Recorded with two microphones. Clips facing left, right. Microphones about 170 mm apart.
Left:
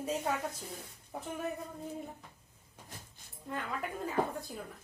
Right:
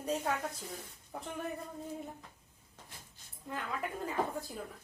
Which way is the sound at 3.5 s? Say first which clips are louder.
Left 1 dB; centre (ahead or behind).